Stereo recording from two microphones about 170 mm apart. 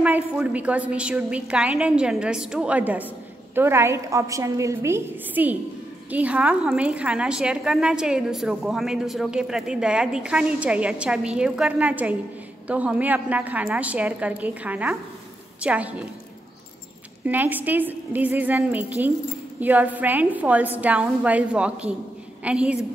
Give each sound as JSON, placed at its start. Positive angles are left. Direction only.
{"t": 0.0, "sound": "a woman's voice", "side_deg": -10}
{"t": 17.2, "sound": "a woman's voice", "side_deg": -10}